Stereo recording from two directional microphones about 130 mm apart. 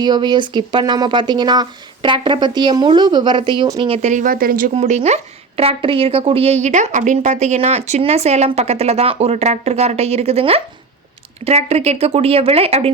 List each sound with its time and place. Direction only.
0.0 s a woman's voice: 35° right (ahead or behind)
4.0 s speech: 80° right
4.7 s a woman's voice: 60° right (ahead or behind)